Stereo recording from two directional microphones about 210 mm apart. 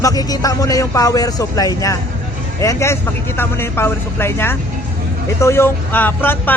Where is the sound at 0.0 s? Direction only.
15° left (ahead or behind).